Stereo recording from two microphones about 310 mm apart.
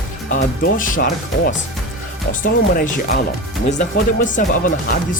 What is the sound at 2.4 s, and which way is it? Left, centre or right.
Speech, left.